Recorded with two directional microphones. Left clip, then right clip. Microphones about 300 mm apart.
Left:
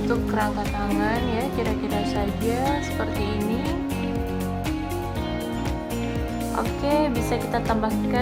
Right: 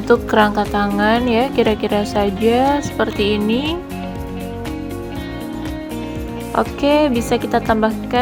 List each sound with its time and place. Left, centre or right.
0.1 s speech: right
6.6 s speech: centre